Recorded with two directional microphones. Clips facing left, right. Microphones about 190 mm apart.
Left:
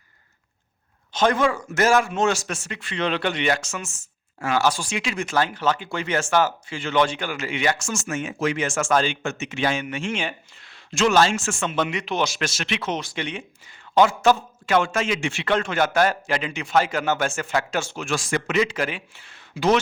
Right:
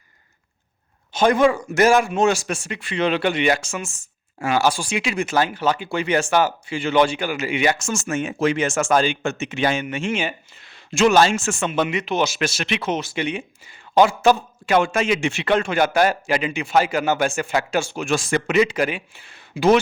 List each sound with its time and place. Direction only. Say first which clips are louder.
1.1 s a man's voice: right 4 dB; 10° right (ahead or behind)
8.9 s a man's voice: right 2 dB; 10° right (ahead or behind)
9.2 s a man's voice: right 3 dB; 25° right (ahead or behind)
10.1 s speech: right 4 dB; 5° right (ahead or behind)
11.0 s a man's voice: right 3 dB; 15° right (ahead or behind)